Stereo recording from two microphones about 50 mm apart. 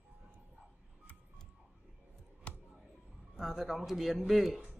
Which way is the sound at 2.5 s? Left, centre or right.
Left.